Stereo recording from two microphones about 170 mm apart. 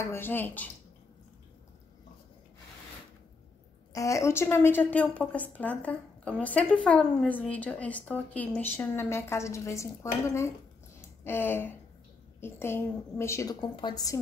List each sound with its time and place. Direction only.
0.0 s a woman's voice: 15° left (ahead or behind)
3.9 s a woman's voice: 20° left (ahead or behind)
11.0 s a sound: 15° left (ahead or behind)
12.4 s a woman's voice: 15° left (ahead or behind)